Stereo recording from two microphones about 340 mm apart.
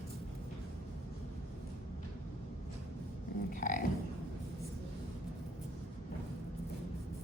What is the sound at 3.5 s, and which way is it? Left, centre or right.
Dog, left.